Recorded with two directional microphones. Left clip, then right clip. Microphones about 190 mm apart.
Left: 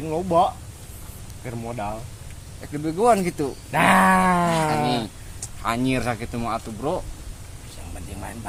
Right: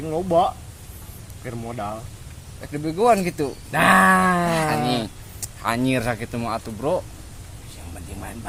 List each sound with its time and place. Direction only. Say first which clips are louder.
0.0 s speech: even; 5° left (ahead or behind)
1.5 s goat: even; 10° left (ahead or behind)
2.6 s speech: right 1 dB; 20° right (ahead or behind)
3.7 s goat: right 2 dB; 10° left (ahead or behind)
4.4 s speech: even; 20° right (ahead or behind)